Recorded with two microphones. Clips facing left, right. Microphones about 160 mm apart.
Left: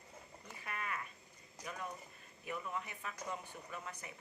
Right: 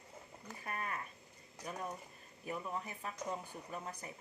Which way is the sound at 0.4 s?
40° right (ahead or behind).